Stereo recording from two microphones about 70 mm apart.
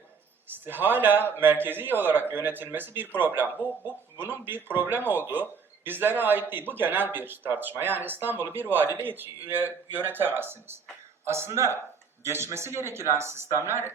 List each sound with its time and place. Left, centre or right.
0.5 s a man's voice: right